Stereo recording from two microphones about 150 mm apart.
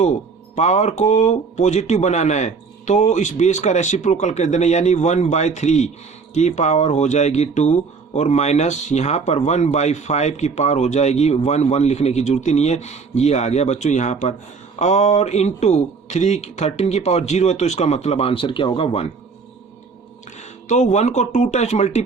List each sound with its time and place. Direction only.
0.5 s speech: 50° left (ahead or behind)
20.4 s speech: 50° left (ahead or behind)